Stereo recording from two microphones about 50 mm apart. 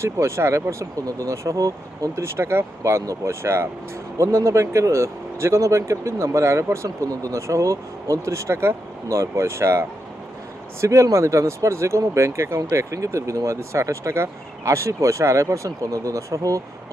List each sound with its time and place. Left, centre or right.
0.0 s speech: right
2.1 s speech: right
4.2 s speech: right
10.8 s speech: right